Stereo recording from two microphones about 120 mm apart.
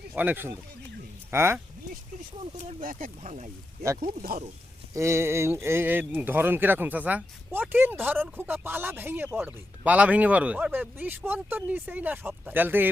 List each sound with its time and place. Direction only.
0.2 s speech: 15° right (ahead or behind)
2.6 s speech: 75° right (ahead or behind)
4.9 s speech: 25° right (ahead or behind)